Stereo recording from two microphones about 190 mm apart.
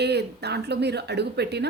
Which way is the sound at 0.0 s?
60° right (ahead or behind).